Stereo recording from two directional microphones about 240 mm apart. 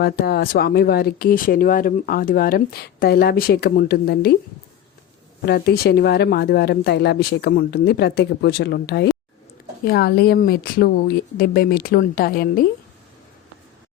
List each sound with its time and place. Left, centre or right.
0.0 s speech: left
5.5 s speech: left